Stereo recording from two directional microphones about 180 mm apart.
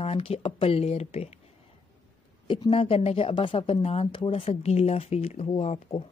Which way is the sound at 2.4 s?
30° left (ahead or behind).